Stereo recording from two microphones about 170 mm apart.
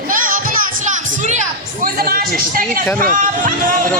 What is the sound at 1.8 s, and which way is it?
A man's voice, 60° right (ahead or behind).